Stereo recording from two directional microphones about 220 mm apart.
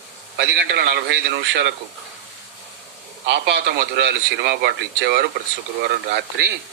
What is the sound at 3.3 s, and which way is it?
Speech, 50° right (ahead or behind).